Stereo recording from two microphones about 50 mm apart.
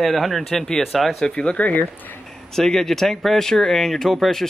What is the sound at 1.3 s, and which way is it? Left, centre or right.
Speech, left.